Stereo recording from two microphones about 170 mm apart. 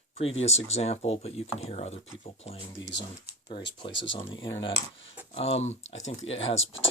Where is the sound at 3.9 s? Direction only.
90° left.